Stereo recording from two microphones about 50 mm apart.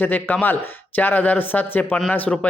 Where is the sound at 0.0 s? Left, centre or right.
Left.